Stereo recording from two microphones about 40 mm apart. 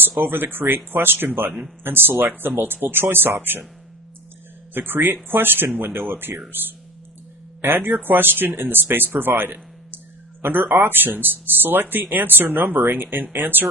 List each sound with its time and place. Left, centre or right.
0.2 s speech: right
4.7 s speech: right
7.6 s speech: right